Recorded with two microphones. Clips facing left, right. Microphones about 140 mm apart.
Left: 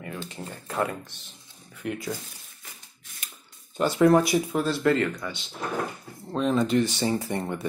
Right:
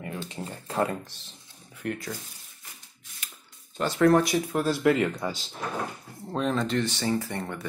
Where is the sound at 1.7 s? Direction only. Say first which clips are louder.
Even; 5° left (ahead or behind).